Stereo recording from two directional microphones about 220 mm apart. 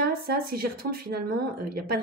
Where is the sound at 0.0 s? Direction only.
45° right (ahead or behind).